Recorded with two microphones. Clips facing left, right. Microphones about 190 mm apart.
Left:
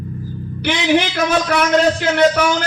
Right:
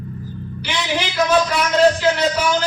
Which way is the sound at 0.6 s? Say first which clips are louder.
Left 8 dB; 55° left (ahead or behind).